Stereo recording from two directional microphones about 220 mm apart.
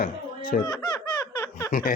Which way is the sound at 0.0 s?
40° left (ahead or behind).